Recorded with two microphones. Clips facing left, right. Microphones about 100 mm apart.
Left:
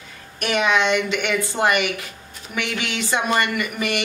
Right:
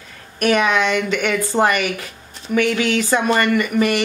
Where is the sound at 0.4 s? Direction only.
45° right (ahead or behind).